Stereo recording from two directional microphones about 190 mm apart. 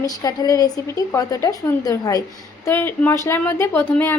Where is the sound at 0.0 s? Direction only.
20° left (ahead or behind).